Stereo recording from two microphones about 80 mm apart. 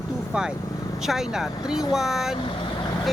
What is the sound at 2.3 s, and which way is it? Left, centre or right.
Vehicle, left.